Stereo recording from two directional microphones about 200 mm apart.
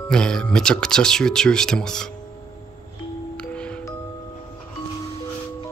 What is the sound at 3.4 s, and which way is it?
Music, 5° left (ahead or behind).